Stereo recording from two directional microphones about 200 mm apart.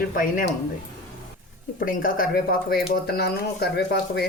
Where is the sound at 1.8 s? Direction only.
45° left (ahead or behind).